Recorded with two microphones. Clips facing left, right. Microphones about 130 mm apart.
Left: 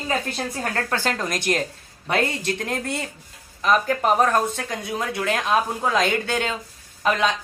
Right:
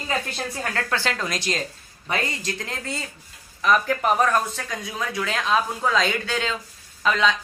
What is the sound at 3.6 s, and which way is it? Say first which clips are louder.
Speech: left 1 dB; 40° left (ahead or behind).